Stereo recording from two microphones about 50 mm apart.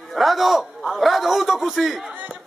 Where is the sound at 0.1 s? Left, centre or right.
Centre.